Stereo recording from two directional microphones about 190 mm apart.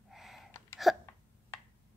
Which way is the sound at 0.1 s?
Centre (ahead or behind).